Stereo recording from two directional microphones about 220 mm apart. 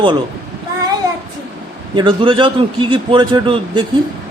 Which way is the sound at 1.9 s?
20° right (ahead or behind).